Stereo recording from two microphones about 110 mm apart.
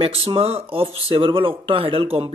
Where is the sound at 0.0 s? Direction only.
60° right (ahead or behind).